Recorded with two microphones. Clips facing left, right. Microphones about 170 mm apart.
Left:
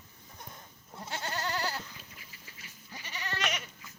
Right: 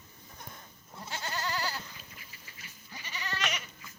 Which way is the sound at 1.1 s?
60° left (ahead or behind).